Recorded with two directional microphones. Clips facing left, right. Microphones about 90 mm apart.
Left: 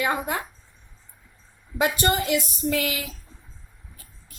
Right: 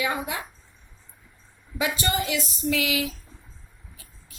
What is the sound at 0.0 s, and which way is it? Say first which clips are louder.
Speech: left 3 dB; 55° left (ahead or behind).